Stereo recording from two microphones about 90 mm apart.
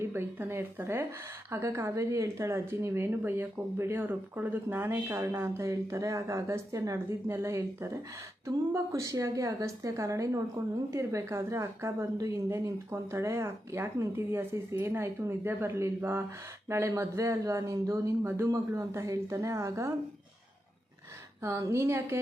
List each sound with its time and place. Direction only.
0.0 s a woman's voice: 25° right (ahead or behind)
21.4 s a woman's voice: 35° right (ahead or behind)